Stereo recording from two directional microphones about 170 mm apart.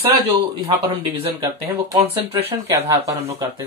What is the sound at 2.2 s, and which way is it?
Speech, 35° right (ahead or behind).